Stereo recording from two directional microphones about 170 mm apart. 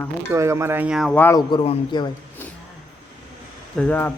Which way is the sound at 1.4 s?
25° left (ahead or behind).